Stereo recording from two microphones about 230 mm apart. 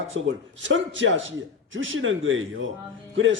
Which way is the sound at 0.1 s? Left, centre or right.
Right.